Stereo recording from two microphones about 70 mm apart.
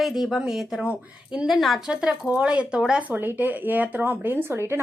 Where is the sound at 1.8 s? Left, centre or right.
Centre.